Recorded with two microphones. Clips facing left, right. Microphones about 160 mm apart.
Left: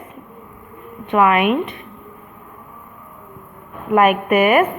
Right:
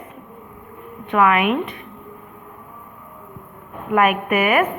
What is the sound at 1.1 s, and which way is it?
Speech, 25° left (ahead or behind).